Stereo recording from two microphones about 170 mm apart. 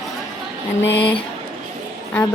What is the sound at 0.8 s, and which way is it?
Speech, 90° left.